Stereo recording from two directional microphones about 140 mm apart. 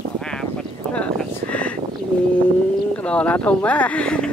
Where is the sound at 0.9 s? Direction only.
10° left (ahead or behind).